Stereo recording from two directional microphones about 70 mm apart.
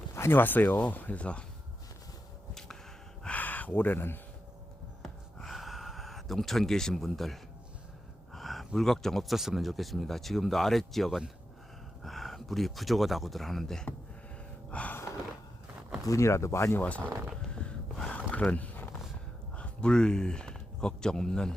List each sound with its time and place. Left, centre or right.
0.1 s speech: left; by 1.5 s centre
3.2 s a sound: left
5.0 s a sound: centre
8.3 s speech: centre
14.7 s gasp: centre
16.0 s speech: left
16.7 s speech: left
17.5 s gasp: centre
18.1 s a sound: centre
19.5 s speech: centre